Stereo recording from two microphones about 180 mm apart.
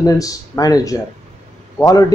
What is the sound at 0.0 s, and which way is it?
Speech, 20° left (ahead or behind).